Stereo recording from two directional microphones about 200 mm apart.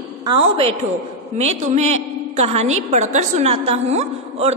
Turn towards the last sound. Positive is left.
turn(degrees=-30)  # may be behind; listen again after turning